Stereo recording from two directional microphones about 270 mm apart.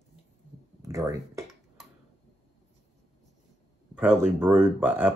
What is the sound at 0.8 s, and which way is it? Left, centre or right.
Speech, centre.